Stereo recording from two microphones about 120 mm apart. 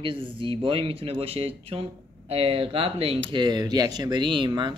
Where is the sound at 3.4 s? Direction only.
35° right (ahead or behind).